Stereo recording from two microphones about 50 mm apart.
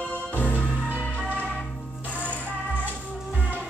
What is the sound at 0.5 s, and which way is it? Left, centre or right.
Music, right.